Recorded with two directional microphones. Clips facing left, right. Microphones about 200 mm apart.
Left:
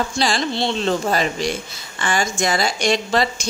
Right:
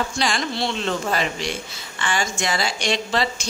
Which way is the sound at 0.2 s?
30° left (ahead or behind).